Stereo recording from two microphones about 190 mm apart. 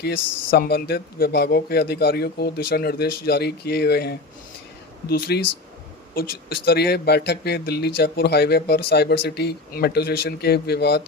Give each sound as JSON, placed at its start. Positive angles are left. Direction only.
{"t": 0.0, "sound": "speech", "side_deg": 55}